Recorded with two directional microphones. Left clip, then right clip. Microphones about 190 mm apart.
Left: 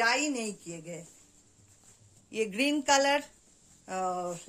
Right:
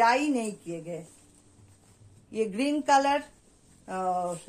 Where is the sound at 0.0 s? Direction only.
30° left (ahead or behind).